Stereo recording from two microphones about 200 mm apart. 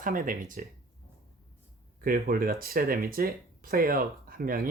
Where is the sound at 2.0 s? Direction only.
45° right (ahead or behind).